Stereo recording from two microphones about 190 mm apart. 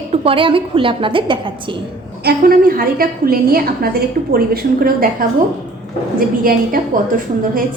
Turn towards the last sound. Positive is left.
turn(degrees=-50)  # may be behind; listen again after turning